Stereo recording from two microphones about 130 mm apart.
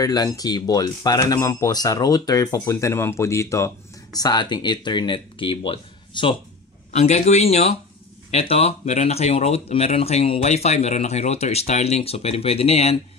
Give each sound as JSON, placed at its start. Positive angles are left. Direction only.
{"t": 0.0, "sound": "speech", "side_deg": 30}
{"t": 6.9, "sound": "speech", "side_deg": 60}